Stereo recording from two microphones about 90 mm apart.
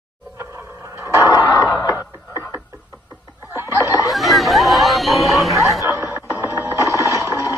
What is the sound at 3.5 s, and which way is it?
Snicker, 30° right (ahead or behind).